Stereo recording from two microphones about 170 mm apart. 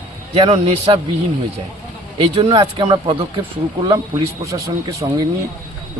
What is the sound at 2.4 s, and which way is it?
A man's voice, 35° right (ahead or behind).